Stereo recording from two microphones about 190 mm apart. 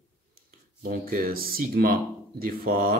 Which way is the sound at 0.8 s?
50° right (ahead or behind).